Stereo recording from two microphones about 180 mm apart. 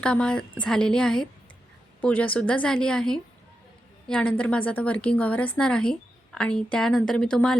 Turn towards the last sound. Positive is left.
turn(degrees=5)  # may be behind; listen again after turning